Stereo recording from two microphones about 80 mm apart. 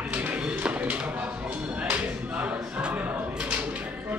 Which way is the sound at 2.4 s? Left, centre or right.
Centre.